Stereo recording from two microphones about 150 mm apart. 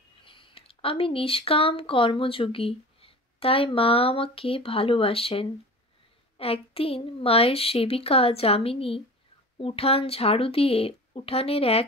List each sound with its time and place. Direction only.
0.2 s a woman's voice: 35° left (ahead or behind)